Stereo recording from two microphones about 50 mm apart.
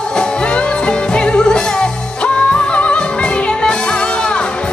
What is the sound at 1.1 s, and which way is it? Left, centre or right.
Music, centre.